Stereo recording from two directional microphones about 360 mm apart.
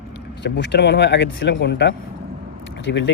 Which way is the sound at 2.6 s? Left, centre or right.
Left.